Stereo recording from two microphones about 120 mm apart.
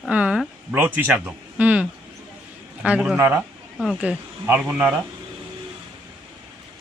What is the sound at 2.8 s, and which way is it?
Speech, 10° right (ahead or behind).